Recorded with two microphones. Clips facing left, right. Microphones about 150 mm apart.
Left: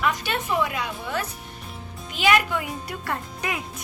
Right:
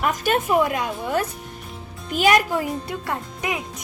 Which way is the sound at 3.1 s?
20° right (ahead or behind).